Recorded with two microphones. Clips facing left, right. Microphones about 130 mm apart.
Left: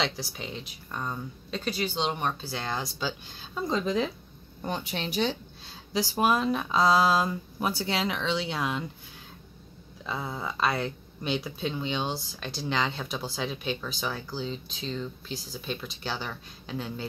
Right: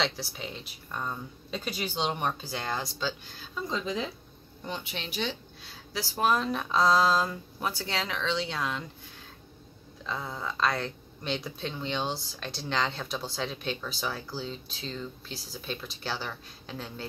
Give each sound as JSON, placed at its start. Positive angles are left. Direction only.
{"t": 0.0, "sound": "speech", "side_deg": 0}
{"t": 2.7, "sound": "speech", "side_deg": 5}
{"t": 3.7, "sound": "speech", "side_deg": 50}
{"t": 5.9, "sound": "speech", "side_deg": 15}
{"t": 10.0, "sound": "speech", "side_deg": 10}